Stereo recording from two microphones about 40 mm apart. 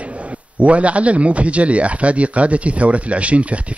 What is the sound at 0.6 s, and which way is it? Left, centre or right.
A man's voice, right.